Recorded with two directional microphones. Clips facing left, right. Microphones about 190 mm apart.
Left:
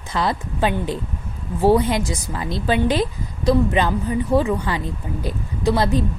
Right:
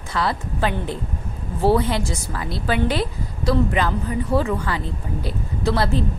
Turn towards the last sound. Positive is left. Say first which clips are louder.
# left 2 dB
turn(degrees=15)  # may be behind; listen again after turning